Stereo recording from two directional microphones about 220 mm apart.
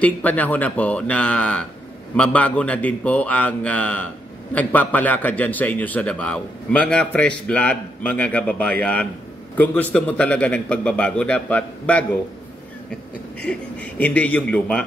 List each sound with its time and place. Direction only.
0.0 s a man's voice: 5° left (ahead or behind)
13.4 s a man's voice: 5° left (ahead or behind)